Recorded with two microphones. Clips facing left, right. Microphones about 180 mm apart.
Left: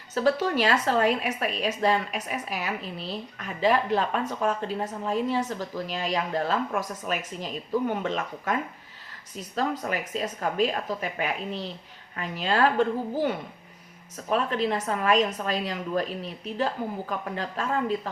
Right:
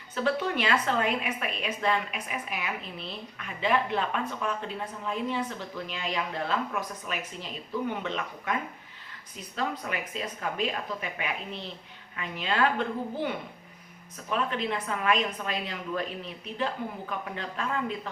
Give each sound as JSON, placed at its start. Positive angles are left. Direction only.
{"t": 0.1, "sound": "a woman's voice", "side_deg": 40}
{"t": 9.6, "sound": "a woman's voice", "side_deg": 45}
{"t": 14.3, "sound": "a woman's voice", "side_deg": 40}